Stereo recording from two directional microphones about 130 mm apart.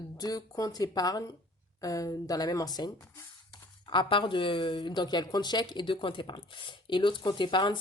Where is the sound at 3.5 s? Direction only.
40° left (ahead or behind).